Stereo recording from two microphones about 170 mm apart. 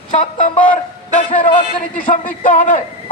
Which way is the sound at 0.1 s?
45° left (ahead or behind).